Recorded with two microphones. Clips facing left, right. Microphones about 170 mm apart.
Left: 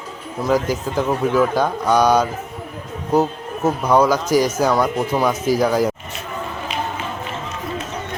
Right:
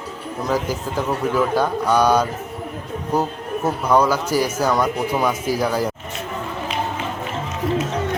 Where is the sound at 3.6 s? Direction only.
10° left (ahead or behind).